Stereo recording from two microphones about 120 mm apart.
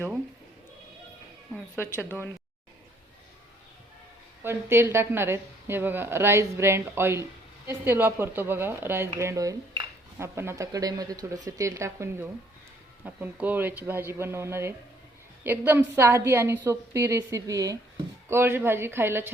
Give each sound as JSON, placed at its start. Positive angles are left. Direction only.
{"t": 1.7, "sound": "speech", "side_deg": 20}
{"t": 4.4, "sound": "a woman's voice", "side_deg": -20}